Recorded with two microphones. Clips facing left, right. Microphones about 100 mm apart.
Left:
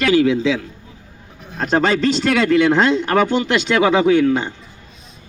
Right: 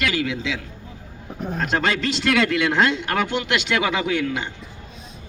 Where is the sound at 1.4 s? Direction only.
45° right (ahead or behind).